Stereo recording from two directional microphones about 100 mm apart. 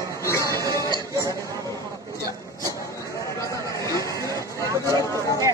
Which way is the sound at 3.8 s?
30° left (ahead or behind).